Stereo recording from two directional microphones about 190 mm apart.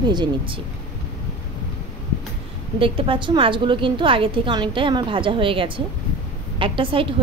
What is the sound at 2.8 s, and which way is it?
Speech, 25° right (ahead or behind).